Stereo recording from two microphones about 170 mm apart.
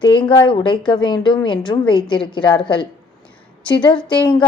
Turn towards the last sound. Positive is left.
turn(degrees=25)  # may be behind; listen again after turning